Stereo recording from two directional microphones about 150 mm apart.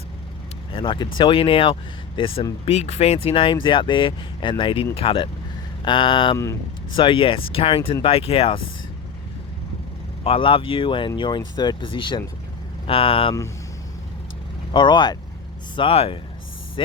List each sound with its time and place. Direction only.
0.7 s speech: 35° left (ahead or behind)
6.3 s speech: 20° left (ahead or behind)
6.9 s speech: 35° left (ahead or behind)
10.2 s speech: 40° left (ahead or behind)
14.7 s speech: 30° left (ahead or behind)